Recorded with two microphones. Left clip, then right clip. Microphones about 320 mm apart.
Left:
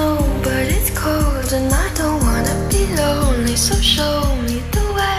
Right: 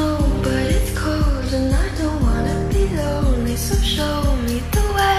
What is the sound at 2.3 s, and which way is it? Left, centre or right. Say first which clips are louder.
Music: left 2 dB; left.